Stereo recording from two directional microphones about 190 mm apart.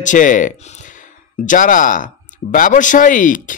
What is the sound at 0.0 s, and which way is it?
Speech, 40° left (ahead or behind).